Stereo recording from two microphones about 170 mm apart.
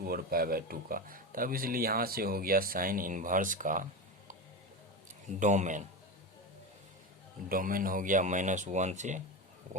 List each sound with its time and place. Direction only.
0.0 s speech: 60° right (ahead or behind)
5.4 s speech: 45° right (ahead or behind)
7.5 s speech: 55° right (ahead or behind)